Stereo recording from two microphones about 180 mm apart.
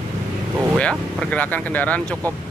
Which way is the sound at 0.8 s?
5° left (ahead or behind).